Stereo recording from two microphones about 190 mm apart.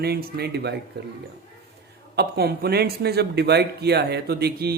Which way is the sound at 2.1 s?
60° right (ahead or behind).